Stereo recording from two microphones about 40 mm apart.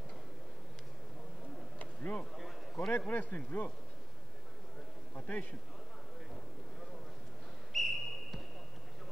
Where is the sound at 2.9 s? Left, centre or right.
Left.